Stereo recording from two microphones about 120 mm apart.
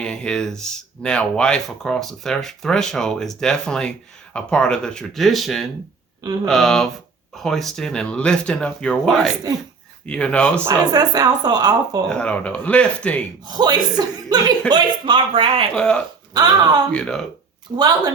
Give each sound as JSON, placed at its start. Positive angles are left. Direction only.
{"t": 0.0, "sound": "speech", "side_deg": 5}
{"t": 10.7, "sound": "speech", "side_deg": -30}
{"t": 12.0, "sound": "speech", "side_deg": 10}
{"t": 13.5, "sound": "speech", "side_deg": -35}
{"t": 15.7, "sound": "speech", "side_deg": 10}
{"t": 16.3, "sound": "speech", "side_deg": -35}
{"t": 16.9, "sound": "speech", "side_deg": 5}
{"t": 17.7, "sound": "speech", "side_deg": -35}